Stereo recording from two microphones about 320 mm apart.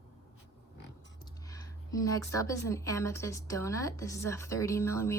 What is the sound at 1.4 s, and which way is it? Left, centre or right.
Speech, centre.